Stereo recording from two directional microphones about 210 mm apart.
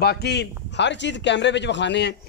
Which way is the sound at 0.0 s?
50° left (ahead or behind).